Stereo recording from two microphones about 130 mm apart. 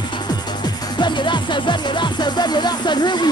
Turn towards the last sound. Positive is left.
turn(degrees=35)  # may be behind; listen again after turning